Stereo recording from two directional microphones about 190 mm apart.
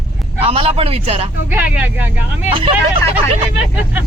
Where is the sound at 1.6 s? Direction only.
5° right (ahead or behind).